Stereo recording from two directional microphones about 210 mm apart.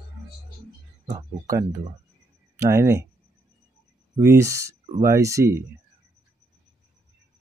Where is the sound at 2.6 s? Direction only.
15° right (ahead or behind).